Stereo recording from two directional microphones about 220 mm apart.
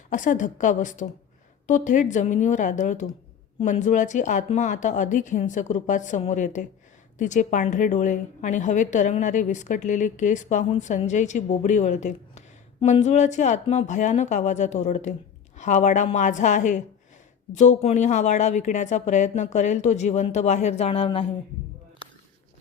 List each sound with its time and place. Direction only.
0.1 s a woman's voice: 35° left (ahead or behind)